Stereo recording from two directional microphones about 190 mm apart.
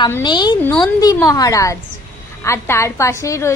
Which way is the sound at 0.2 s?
25° left (ahead or behind).